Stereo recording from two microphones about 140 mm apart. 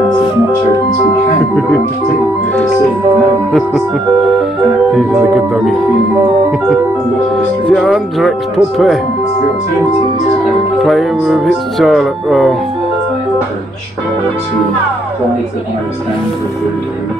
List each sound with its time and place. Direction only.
4.9 s speech: centre (ahead or behind)
7.7 s speech: centre (ahead or behind)
10.8 s speech: centre (ahead or behind)